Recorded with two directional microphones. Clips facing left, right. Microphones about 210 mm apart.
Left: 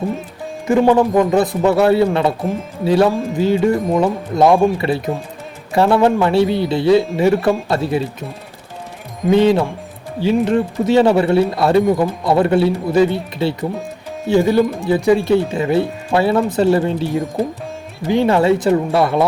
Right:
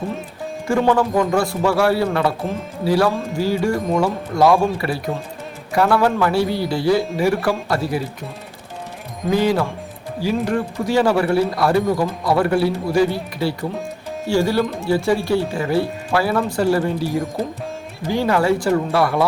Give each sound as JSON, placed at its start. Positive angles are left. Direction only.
{"t": 0.7, "sound": "speech", "side_deg": 20}
{"t": 9.3, "sound": "speech", "side_deg": 25}